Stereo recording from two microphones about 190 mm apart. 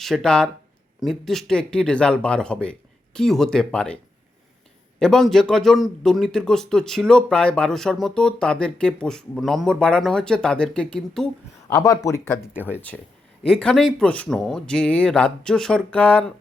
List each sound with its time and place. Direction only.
0.0 s a man's voice: 5° left (ahead or behind)
4.9 s a man's voice: 5° left (ahead or behind)
11.7 s speech: 20° left (ahead or behind)
12.9 s a man's voice: 5° left (ahead or behind)